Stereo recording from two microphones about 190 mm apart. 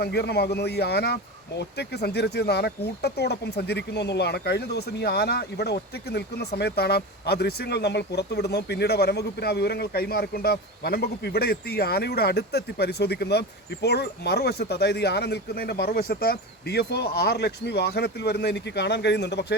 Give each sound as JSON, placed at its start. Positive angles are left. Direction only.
{"t": 0.0, "sound": "speech", "side_deg": 60}